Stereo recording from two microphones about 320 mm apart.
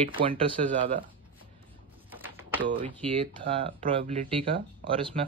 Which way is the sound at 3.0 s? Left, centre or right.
Centre.